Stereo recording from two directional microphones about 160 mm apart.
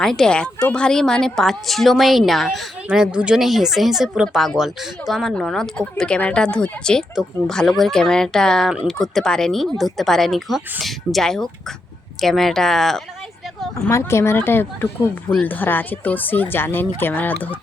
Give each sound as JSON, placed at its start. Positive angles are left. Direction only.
{"t": 0.0, "sound": "a woman's voice", "side_deg": 5}
{"t": 13.8, "sound": "speech", "side_deg": 15}